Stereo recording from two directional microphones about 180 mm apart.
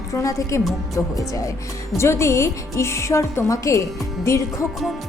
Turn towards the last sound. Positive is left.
turn(degrees=15)  # may be behind; listen again after turning